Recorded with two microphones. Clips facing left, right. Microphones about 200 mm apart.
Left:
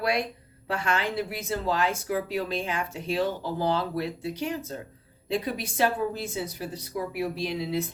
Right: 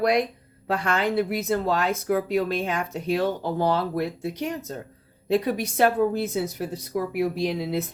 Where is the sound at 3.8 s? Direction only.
55° right (ahead or behind).